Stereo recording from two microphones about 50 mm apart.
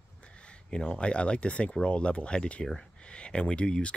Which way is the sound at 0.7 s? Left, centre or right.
Centre.